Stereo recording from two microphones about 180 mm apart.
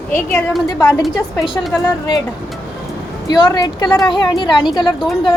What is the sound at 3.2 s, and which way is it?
A woman's voice, 25° left (ahead or behind).